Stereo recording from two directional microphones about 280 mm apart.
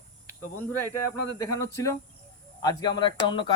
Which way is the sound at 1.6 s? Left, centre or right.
Centre.